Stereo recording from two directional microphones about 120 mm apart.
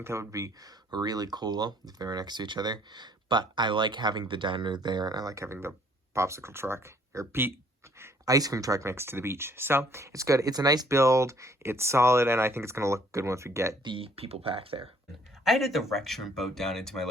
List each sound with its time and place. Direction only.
0.0 s speech: 20° right (ahead or behind)
13.8 s speech: 45° right (ahead or behind)
15.4 s speech: centre (ahead or behind)